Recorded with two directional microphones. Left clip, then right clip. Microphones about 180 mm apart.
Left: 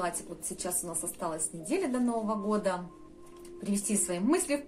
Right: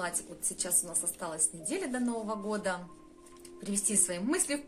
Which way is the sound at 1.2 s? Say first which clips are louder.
Left 4 dB; 25° right (ahead or behind).